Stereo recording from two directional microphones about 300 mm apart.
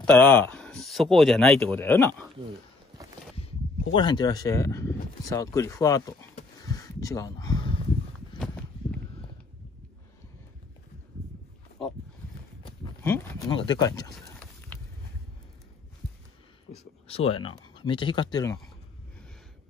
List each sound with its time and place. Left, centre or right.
0.0 s speech: centre
3.9 s speech: centre
6.6 s a sound: centre
12.6 s speech: centre
14.7 s vehicle: centre
16.7 s speech: centre